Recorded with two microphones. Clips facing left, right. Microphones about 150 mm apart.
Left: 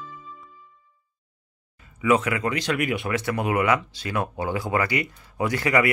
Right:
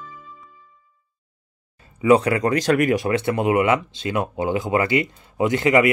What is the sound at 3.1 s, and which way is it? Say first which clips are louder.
Speech: right 5 dB; 25° right (ahead or behind).